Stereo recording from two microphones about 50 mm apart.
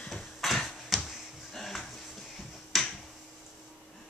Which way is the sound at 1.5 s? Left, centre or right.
Centre.